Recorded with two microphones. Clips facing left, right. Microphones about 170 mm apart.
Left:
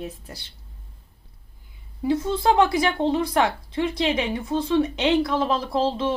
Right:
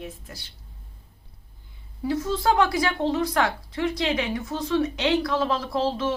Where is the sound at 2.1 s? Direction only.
25° left (ahead or behind).